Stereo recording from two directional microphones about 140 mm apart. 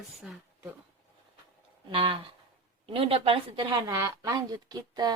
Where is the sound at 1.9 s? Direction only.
35° right (ahead or behind).